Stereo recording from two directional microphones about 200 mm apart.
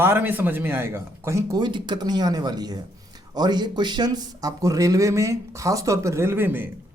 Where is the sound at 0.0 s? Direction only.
10° right (ahead or behind).